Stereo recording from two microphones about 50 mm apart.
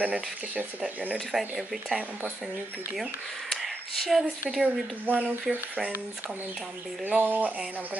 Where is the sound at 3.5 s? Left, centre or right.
Centre.